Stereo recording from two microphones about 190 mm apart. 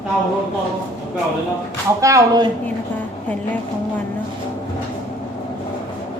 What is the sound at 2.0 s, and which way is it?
Speech, 15° right (ahead or behind).